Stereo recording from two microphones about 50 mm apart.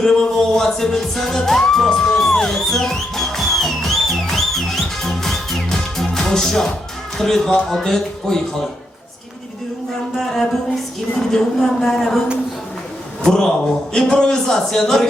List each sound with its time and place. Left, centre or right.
0.0 s music: centre
7.2 s speech: centre
10.2 s music: centre
11.2 s speech: centre
13.2 s speech: centre